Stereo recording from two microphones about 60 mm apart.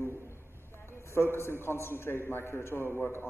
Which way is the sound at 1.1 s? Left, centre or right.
Left.